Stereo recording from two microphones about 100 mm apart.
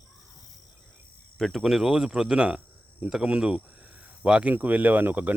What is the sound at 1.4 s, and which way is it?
Speech, centre (ahead or behind).